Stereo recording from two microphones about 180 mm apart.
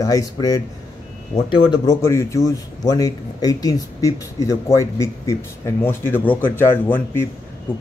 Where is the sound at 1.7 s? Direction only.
20° left (ahead or behind).